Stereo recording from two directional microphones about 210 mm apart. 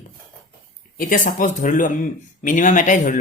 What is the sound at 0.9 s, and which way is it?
Speech, 40° left (ahead or behind).